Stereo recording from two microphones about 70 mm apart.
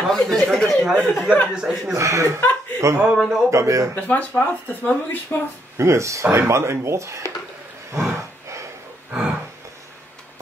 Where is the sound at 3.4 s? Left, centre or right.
Right.